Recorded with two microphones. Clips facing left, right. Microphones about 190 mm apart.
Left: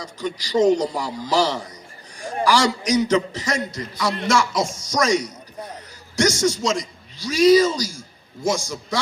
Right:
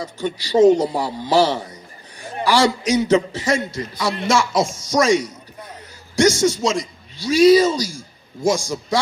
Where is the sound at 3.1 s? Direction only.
30° right (ahead or behind).